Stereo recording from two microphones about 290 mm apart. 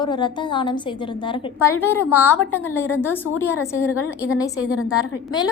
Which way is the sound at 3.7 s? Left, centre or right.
Left.